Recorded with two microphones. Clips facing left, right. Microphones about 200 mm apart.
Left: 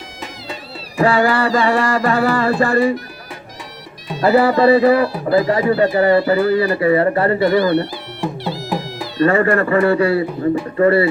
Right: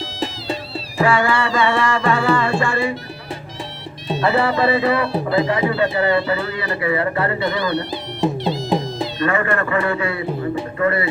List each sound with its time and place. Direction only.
1.0 s music: 35° left (ahead or behind)
2.6 s a man's voice: 35° left (ahead or behind)
4.3 s a man's voice: 35° left (ahead or behind)
5.1 s speech: 25° right (ahead or behind)
5.5 s a man's voice: 40° left (ahead or behind)
7.3 s music: 20° right (ahead or behind)
9.2 s a man's voice: 35° left (ahead or behind)